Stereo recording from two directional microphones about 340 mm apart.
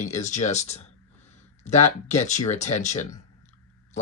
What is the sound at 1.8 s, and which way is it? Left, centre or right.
Speech, centre.